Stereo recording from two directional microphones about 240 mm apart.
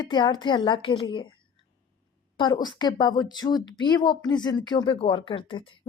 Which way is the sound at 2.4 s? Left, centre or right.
Centre.